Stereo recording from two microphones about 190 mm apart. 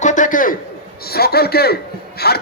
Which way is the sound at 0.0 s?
40° left (ahead or behind).